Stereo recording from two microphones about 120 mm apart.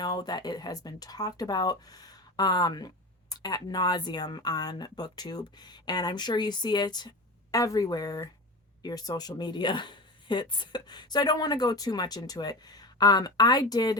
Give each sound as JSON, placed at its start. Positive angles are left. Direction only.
{"t": 0.0, "sound": "speech", "side_deg": 35}